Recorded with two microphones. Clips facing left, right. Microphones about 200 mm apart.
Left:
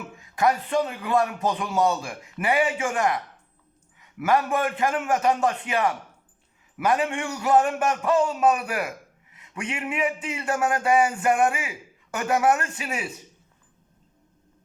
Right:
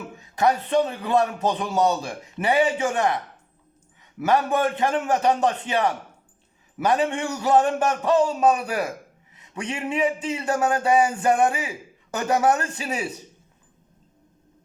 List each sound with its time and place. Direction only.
0.2 s a man's voice: 30° right (ahead or behind)
4.3 s a man's voice: 25° right (ahead or behind)